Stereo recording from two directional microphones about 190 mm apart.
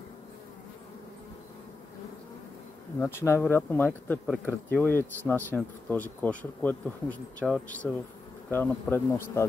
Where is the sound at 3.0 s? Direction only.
10° left (ahead or behind).